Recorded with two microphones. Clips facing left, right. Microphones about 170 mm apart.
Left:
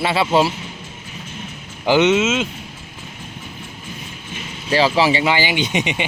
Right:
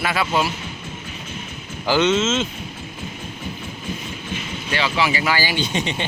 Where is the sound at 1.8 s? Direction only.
20° left (ahead or behind).